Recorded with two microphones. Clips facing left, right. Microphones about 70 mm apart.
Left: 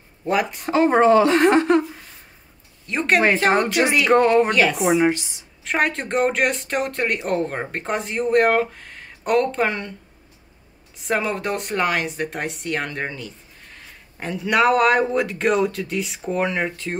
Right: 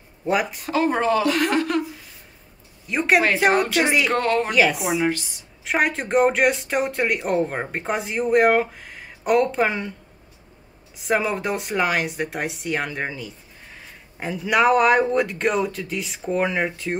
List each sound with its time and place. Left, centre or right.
0.2 s speech: centre
0.7 s a woman's voice: left
2.9 s speech: centre
4.1 s speech: centre
4.5 s speech: centre
5.0 s a woman's voice: left
5.6 s speech: centre
11.0 s speech: centre